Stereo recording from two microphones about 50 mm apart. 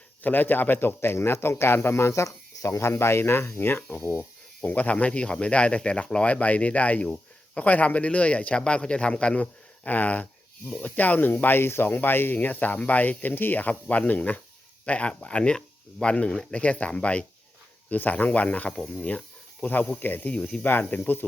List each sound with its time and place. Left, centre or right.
0.2 s speech: left
2.9 s speech: left
3.8 s speech: left; by 16.6 s centre
16.6 s speech: left
20.0 s speech: left
20.4 s speech: left
20.9 s speech: left